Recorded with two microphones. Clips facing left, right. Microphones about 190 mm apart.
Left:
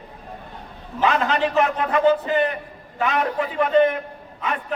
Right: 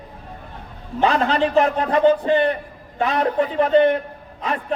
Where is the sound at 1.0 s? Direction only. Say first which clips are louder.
Right 2 dB; 35° right (ahead or behind).